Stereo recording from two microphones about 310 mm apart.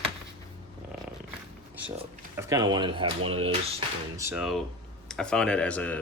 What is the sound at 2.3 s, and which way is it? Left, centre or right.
Speech, centre.